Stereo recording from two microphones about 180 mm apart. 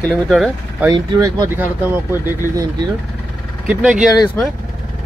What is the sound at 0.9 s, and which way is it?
Speech, 20° right (ahead or behind).